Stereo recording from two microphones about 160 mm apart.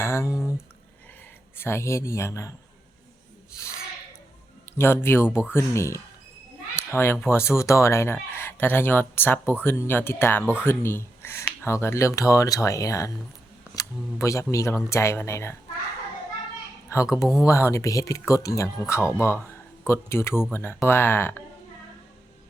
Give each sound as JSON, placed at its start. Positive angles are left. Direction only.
{"t": 0.0, "sound": "a sound", "side_deg": 15}
{"t": 1.5, "sound": "speech", "side_deg": 15}
{"t": 4.8, "sound": "speech", "side_deg": 15}
{"t": 10.4, "sound": "speech", "side_deg": -5}
{"t": 10.7, "sound": "speech", "side_deg": 15}
{"t": 16.9, "sound": "speech", "side_deg": 20}